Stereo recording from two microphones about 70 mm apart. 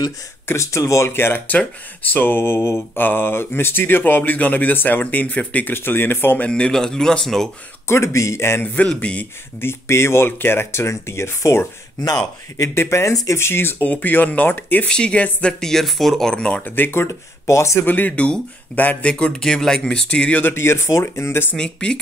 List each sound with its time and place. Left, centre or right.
0.5 s speech: left
5.8 s speech: left
6.5 s speech: centre
7.8 s speech: left
8.8 s speech: centre
9.6 s speech: left
13.1 s speech: left
13.4 s speech: left
14.9 s speech: centre
16.6 s speech: left
17.1 s speech: left
17.8 s speech: left
20.5 s speech: left
21.5 s speech: centre